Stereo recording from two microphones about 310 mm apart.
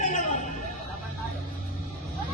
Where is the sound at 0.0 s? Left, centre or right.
Left.